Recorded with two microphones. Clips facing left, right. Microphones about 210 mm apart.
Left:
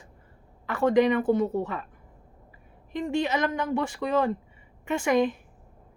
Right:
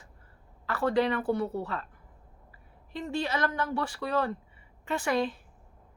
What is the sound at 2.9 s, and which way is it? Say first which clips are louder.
A woman's voice: left 5 dB; 20° left (ahead or behind).